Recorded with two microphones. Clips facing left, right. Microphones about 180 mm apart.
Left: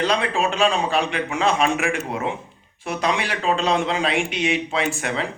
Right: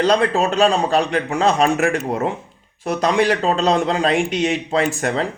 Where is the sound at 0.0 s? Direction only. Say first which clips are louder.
Right 5 dB; 40° right (ahead or behind).